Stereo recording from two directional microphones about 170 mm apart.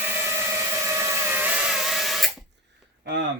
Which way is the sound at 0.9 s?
10° right (ahead or behind).